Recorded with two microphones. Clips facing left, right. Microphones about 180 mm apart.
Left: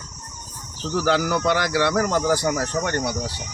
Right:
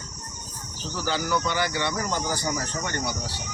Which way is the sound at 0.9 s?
85° left.